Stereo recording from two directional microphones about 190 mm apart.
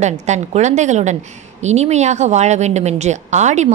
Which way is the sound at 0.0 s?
35° right (ahead or behind).